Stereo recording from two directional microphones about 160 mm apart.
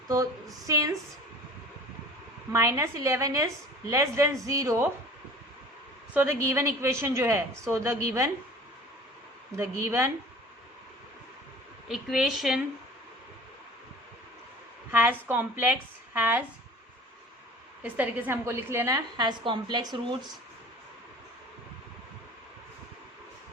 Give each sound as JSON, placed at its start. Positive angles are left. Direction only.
{"t": 0.7, "sound": "a woman's voice", "side_deg": -20}
{"t": 2.5, "sound": "a woman's voice", "side_deg": -20}
{"t": 6.1, "sound": "a woman's voice", "side_deg": -15}
{"t": 9.6, "sound": "a woman's voice", "side_deg": -15}
{"t": 11.9, "sound": "a woman's voice", "side_deg": 0}
{"t": 14.9, "sound": "a woman's voice", "side_deg": -10}
{"t": 17.8, "sound": "a woman's voice", "side_deg": -10}